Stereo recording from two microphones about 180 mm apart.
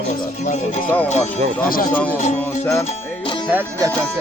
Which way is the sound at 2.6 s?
15° left (ahead or behind).